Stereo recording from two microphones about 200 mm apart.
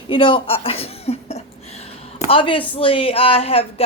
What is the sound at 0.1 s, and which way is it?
Speech, 25° left (ahead or behind).